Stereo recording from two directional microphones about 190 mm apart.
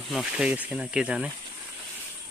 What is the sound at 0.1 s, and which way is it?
Speech, 5° right (ahead or behind).